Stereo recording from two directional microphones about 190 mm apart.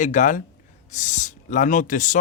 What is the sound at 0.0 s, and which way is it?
Speech, 40° left (ahead or behind).